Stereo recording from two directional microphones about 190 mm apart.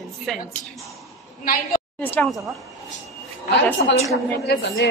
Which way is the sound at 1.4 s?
45° left (ahead or behind).